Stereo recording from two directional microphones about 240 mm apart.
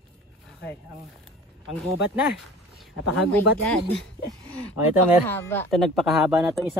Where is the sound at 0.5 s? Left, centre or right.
Centre.